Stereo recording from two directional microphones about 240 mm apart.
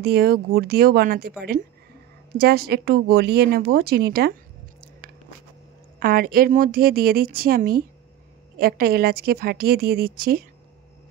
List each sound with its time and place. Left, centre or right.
0.0 s speech: right
2.3 s speech: right
5.9 s speech: right